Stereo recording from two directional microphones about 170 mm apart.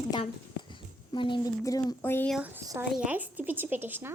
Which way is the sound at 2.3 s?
10° right (ahead or behind).